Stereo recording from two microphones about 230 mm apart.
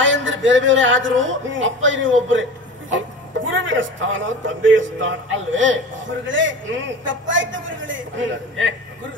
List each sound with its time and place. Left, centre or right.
0.0 s speech: right